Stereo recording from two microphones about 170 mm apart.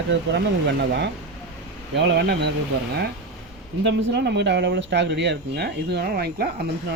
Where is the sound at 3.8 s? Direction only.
85° right; by 6.5 s 65° right (ahead or behind).